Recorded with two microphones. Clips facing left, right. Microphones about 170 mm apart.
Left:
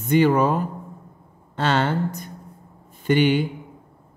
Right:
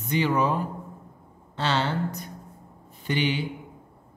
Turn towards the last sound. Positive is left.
turn(degrees=50)  # may be behind; listen again after turning